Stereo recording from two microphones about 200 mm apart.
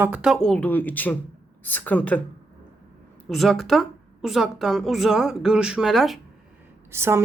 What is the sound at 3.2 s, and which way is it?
A woman's voice, centre (ahead or behind).